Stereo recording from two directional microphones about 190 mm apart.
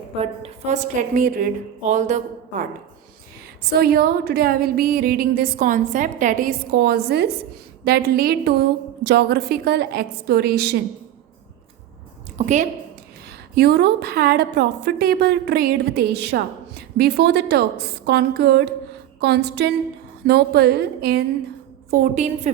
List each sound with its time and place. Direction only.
0.2 s a woman's voice: 35° right (ahead or behind)
3.6 s a woman's voice: 55° right (ahead or behind)
12.4 s a woman's voice: 40° right (ahead or behind)
13.6 s a woman's voice: 60° right (ahead or behind)
21.8 s a woman's voice: 45° right (ahead or behind)